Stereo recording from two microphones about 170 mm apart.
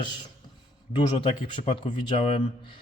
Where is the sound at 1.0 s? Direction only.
30° left (ahead or behind).